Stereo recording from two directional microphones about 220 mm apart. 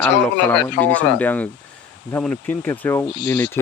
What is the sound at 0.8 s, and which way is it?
Speech, 5° left (ahead or behind).